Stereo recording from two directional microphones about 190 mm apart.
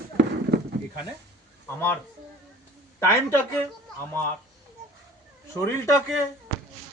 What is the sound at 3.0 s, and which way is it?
Speech, 15° left (ahead or behind).